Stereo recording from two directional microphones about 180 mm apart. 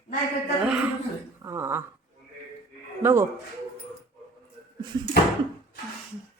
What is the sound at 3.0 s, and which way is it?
Speech, 15° right (ahead or behind).